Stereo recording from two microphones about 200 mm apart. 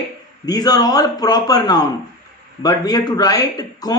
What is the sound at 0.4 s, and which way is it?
A man's voice, 20° left (ahead or behind).